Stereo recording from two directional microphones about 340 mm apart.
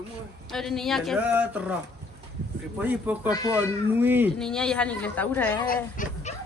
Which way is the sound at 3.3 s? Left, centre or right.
Centre.